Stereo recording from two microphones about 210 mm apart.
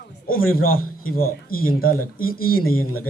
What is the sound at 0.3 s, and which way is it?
A man's voice, 45° left (ahead or behind).